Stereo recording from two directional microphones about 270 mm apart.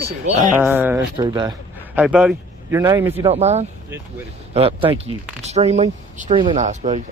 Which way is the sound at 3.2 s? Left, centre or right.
Right.